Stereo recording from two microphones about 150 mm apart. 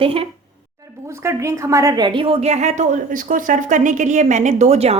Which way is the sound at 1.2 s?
20° right (ahead or behind).